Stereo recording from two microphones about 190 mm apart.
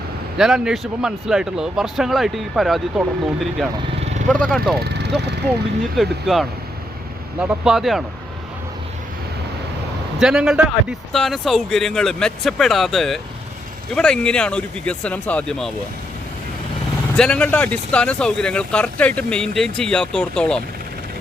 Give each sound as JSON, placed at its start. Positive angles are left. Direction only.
{"t": 0.3, "sound": "speech", "side_deg": -5}
{"t": 4.0, "sound": "vehicle", "side_deg": -35}
{"t": 4.3, "sound": "speech", "side_deg": 5}
{"t": 4.8, "sound": "vehicle", "side_deg": -60}
{"t": 6.0, "sound": "speech", "side_deg": 0}
{"t": 10.2, "sound": "speech", "side_deg": -5}
{"t": 17.2, "sound": "speech", "side_deg": 5}